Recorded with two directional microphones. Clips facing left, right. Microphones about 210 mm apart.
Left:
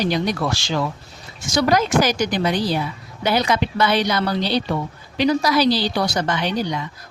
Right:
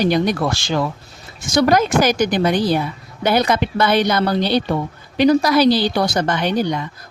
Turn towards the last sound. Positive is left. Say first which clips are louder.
# right 4 dB
turn(degrees=-50)  # may be behind; listen again after turning